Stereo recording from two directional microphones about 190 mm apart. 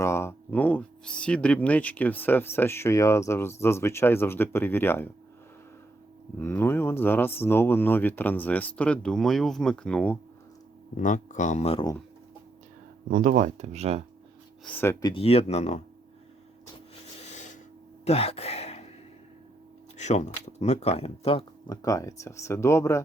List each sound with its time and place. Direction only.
0.0 s speech: 15° left (ahead or behind)
6.4 s speech: 10° left (ahead or behind)
10.9 s speech: 40° left (ahead or behind)
13.1 s speech: 45° right (ahead or behind)
14.6 s speech: 10° left (ahead or behind)
15.1 s speech: 30° left (ahead or behind)
17.2 s a sound: 40° left (ahead or behind)
18.0 s speech: 30° left (ahead or behind)
20.0 s speech: 35° left (ahead or behind); by 23.0 s 15° left (ahead or behind)